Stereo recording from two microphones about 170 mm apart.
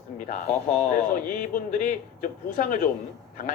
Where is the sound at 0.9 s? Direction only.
55° left (ahead or behind).